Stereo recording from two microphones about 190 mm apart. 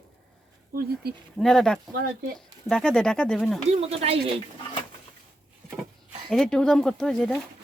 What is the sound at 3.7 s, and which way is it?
Speech, 35° right (ahead or behind).